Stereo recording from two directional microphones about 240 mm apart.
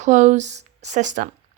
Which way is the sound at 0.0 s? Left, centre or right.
Right.